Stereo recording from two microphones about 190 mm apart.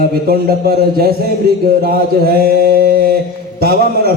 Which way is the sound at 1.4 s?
55° right (ahead or behind).